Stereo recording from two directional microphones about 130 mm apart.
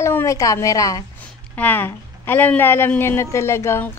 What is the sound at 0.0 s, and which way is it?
A woman's voice, 20° left (ahead or behind).